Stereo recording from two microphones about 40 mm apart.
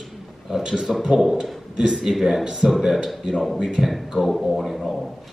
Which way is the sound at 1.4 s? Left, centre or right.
Centre.